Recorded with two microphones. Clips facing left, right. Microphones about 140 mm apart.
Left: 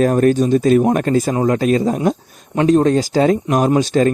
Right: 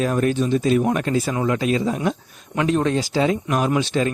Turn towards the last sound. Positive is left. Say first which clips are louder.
# left 6 dB
turn(degrees=40)  # may be behind; listen again after turning